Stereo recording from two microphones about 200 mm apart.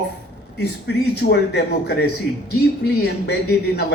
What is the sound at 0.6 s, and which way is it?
A man's voice, 55° left (ahead or behind).